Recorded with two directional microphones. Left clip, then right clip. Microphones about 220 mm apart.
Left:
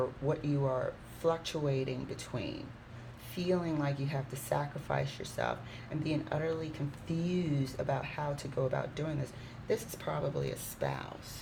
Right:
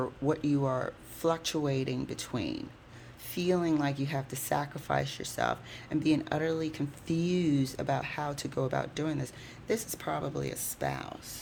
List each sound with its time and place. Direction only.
0.0 s speech: 55° right (ahead or behind)